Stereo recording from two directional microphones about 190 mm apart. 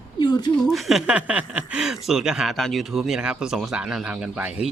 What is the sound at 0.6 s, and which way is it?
Speech, centre (ahead or behind).